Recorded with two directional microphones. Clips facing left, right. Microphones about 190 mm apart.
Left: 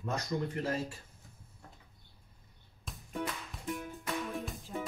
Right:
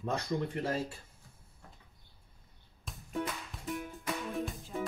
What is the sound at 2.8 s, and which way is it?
Music, centre (ahead or behind).